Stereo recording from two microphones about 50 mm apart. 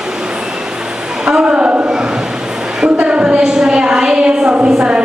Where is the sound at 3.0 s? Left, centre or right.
Right.